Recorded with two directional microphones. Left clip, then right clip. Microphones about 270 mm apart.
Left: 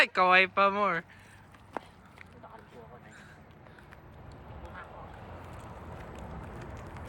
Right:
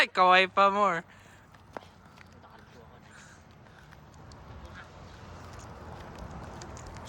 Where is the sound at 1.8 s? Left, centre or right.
Left.